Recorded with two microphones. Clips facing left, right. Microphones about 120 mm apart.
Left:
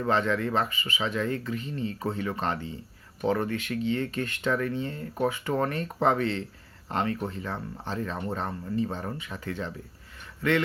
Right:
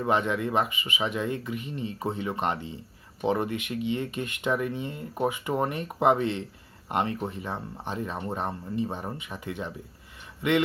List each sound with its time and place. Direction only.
0.0 s speech: 15° right (ahead or behind)